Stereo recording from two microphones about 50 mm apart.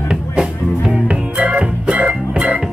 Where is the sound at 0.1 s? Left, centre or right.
Centre.